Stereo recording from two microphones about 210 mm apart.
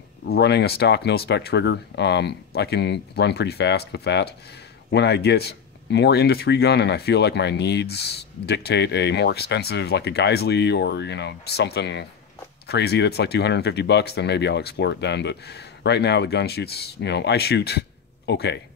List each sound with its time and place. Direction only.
0.3 s speech: 55° left (ahead or behind)